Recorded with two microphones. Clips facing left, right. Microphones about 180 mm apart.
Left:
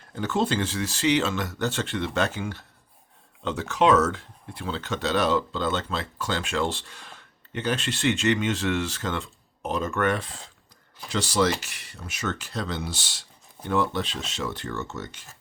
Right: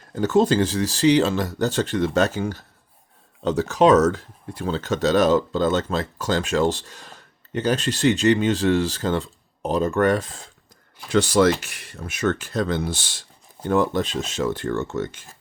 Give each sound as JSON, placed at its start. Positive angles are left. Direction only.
{"t": 0.1, "sound": "speech", "side_deg": -40}
{"t": 11.1, "sound": "speech", "side_deg": -55}